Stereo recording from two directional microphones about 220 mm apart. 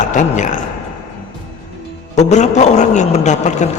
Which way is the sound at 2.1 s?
30° left (ahead or behind).